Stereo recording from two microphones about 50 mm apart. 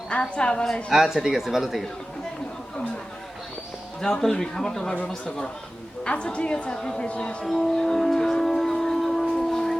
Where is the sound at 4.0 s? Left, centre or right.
Centre.